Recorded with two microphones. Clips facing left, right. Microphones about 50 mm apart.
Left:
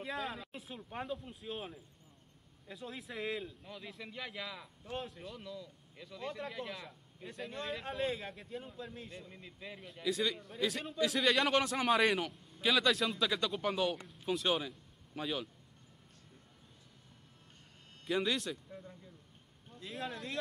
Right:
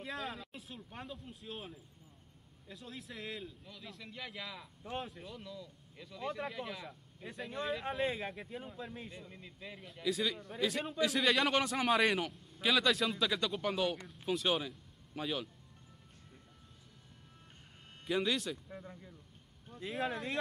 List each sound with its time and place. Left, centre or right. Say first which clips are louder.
0.0 s a man's voice: left 2 dB; centre
3.9 s a man's voice: left 1 dB; centre
9.1 s a man's voice: left 1 dB; centre
18.0 s a man's voice: even; centre
18.7 s speech: right 2 dB; right
19.9 s a man's voice: right 5 dB; centre